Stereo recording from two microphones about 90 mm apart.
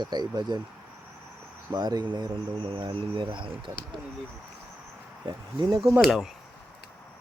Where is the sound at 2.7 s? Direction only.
85° right; by 3.7 s 65° right (ahead or behind).